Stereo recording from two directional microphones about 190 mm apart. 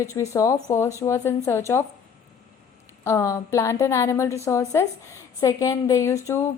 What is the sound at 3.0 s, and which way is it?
A woman's voice, 15° left (ahead or behind).